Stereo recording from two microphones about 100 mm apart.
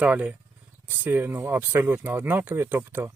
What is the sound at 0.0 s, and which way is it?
Speech, 15° right (ahead or behind).